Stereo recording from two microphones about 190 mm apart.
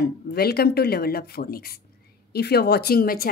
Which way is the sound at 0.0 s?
55° left (ahead or behind).